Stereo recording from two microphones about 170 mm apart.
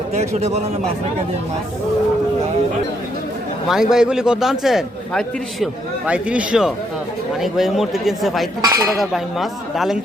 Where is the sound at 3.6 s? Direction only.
5° right (ahead or behind).